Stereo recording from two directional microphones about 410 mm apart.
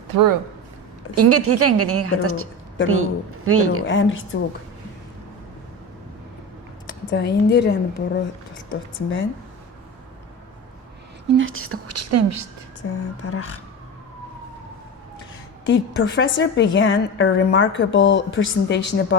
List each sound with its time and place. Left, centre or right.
0.1 s speech: right
1.1 s a woman's voice: right
3.8 s a woman's voice: left
7.1 s a woman's voice: left
11.3 s a woman's voice: right
13.2 s speech: left
15.6 s a woman's voice: left